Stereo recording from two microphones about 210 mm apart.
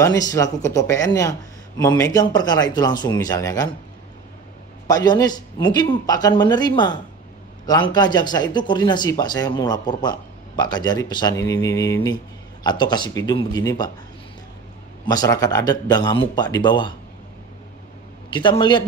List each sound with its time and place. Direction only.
0.0 s speech: 15° left (ahead or behind)
4.8 s speech: 20° left (ahead or behind)
15.0 s speech: 15° left (ahead or behind)
18.3 s speech: 20° left (ahead or behind)